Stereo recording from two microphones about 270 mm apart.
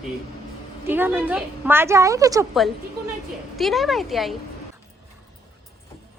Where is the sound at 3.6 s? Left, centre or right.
Centre.